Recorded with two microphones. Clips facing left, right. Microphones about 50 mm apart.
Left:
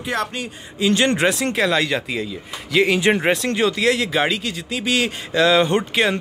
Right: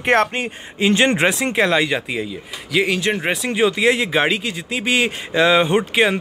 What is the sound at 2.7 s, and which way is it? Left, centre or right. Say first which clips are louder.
Speech: left 2 dB; centre.